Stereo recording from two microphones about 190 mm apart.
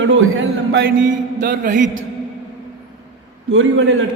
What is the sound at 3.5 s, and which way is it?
Speech, 85° right.